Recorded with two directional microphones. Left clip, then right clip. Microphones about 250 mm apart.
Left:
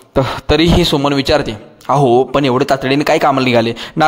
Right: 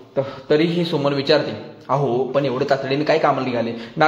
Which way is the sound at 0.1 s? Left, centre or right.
Left.